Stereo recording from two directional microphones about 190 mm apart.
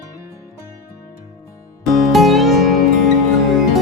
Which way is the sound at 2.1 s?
Centre (ahead or behind).